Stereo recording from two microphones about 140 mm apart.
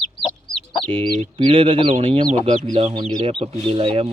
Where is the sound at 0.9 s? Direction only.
40° right (ahead or behind).